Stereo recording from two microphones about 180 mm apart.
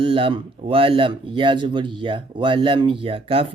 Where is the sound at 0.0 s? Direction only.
30° right (ahead or behind).